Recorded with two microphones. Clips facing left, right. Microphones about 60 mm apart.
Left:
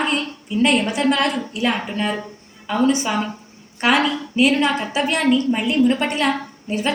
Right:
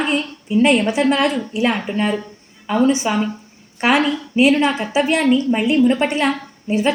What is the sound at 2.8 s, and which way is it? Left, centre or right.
A woman's voice, centre.